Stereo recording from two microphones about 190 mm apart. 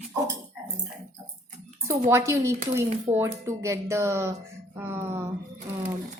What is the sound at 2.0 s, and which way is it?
A woman's voice, 15° right (ahead or behind).